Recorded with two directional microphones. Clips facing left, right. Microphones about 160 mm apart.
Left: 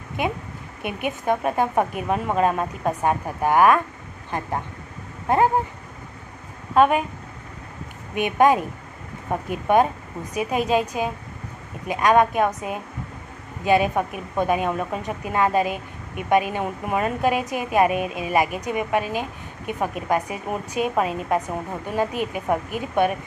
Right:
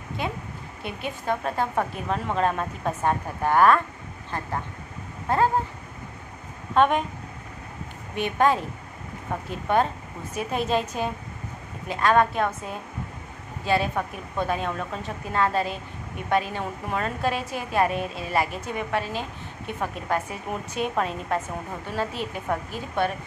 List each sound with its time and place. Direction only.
0.8 s a woman's voice: 15° left (ahead or behind)
5.3 s a woman's voice: 20° left (ahead or behind)
6.7 s a woman's voice: 5° left (ahead or behind)
8.1 s a woman's voice: 15° left (ahead or behind)